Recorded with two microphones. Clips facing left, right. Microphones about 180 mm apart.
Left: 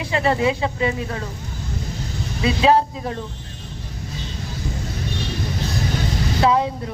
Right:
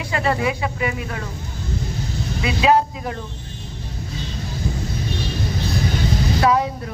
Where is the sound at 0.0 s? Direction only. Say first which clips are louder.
Left 2 dB; 25° left (ahead or behind).